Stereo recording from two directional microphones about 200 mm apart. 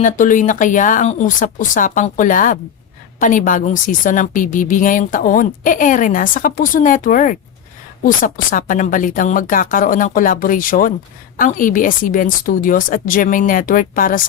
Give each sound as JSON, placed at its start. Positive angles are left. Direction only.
{"t": 0.0, "sound": "a woman's voice", "side_deg": 40}